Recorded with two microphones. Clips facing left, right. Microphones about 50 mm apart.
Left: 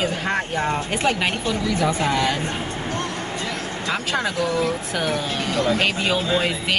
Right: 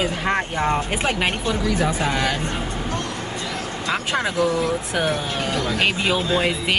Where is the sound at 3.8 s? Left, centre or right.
Right.